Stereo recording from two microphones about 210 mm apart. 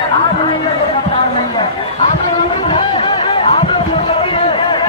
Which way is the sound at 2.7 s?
25° left (ahead or behind).